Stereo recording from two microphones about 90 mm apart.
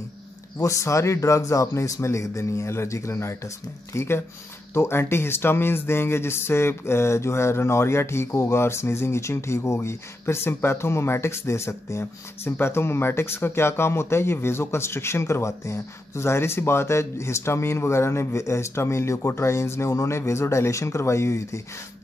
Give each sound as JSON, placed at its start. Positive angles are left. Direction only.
{"t": 0.6, "sound": "speech", "side_deg": 35}